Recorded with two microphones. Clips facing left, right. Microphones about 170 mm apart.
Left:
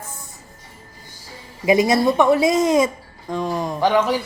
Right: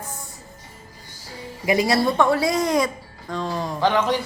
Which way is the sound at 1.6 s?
20° left (ahead or behind).